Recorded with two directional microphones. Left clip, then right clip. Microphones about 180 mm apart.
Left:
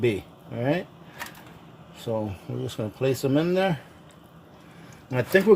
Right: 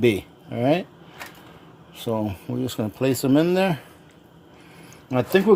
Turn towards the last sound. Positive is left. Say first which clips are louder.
# right 1 dB
turn(degrees=-30)  # may be behind; listen again after turning